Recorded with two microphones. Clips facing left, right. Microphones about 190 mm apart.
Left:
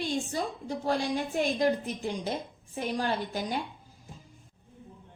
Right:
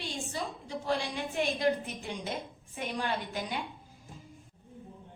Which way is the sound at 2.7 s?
40° left (ahead or behind).